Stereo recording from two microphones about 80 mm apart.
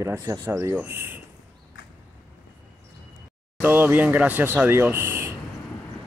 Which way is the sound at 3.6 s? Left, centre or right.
Right.